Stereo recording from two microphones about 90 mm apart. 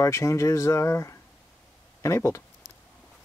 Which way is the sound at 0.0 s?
35° left (ahead or behind).